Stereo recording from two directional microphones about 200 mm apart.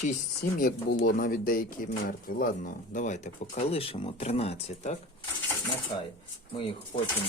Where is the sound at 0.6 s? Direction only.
45° left (ahead or behind); by 7.1 s 25° left (ahead or behind).